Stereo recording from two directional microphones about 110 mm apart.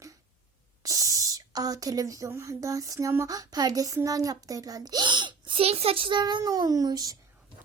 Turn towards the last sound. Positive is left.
turn(degrees=-35)  # may be behind; listen again after turning